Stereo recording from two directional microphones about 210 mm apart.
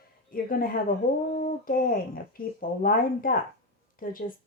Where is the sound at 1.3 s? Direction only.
40° left (ahead or behind).